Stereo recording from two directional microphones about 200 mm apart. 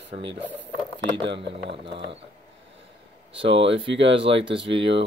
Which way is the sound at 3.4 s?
25° right (ahead or behind).